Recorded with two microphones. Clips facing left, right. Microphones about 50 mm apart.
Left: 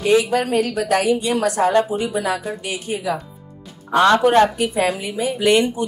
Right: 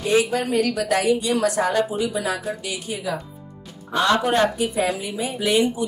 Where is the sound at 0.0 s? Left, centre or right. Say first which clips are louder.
Left 3 dB; left.